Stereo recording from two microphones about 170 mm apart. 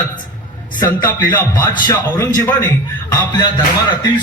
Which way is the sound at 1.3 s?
15° left (ahead or behind).